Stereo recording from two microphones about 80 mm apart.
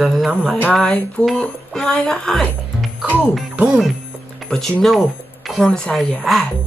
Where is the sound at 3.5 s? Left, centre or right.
Centre.